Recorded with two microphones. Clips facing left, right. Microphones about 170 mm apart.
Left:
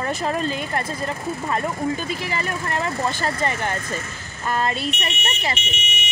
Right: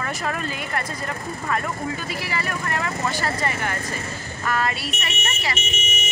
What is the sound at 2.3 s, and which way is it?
Speech, 25° left (ahead or behind).